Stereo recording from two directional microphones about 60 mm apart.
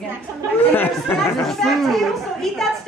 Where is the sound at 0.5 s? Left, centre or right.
Left.